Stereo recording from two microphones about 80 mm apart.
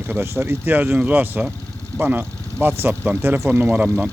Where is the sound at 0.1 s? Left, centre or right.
Right.